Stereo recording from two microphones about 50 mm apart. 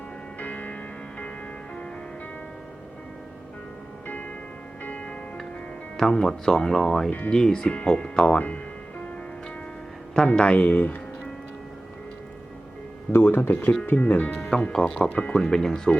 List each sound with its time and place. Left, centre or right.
0.3 s music: left
4.0 s music: left
6.0 s speech: centre
8.4 s speech: left
10.2 s speech: left
13.1 s speech: left
14.7 s speech: centre
15.1 s speech: left
15.4 s speech: centre